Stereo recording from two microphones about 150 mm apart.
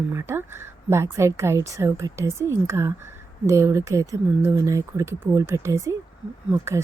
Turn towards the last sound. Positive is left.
turn(degrees=-20)  # may be behind; listen again after turning